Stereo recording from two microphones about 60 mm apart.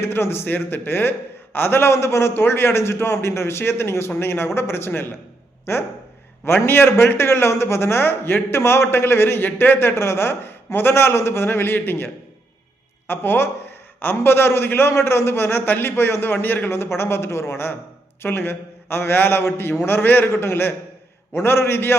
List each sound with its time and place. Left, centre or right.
0.0 s a man's voice: left
6.4 s a man's voice: left